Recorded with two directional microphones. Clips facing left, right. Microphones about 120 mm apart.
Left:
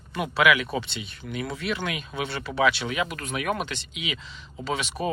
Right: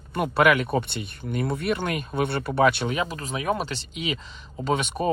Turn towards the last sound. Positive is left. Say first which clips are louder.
# right 4 dB
turn(degrees=-45)  # may be behind; listen again after turning